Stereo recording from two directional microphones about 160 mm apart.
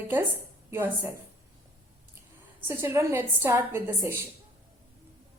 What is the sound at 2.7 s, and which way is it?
A woman's voice, 15° right (ahead or behind).